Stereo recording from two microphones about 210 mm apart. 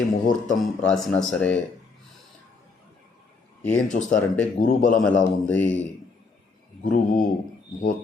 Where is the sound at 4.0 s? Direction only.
45° left (ahead or behind).